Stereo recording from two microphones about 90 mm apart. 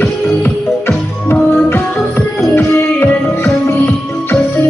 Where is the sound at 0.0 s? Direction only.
25° left (ahead or behind).